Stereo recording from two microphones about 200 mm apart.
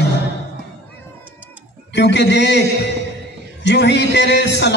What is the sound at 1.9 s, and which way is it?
Speech, 60° left (ahead or behind).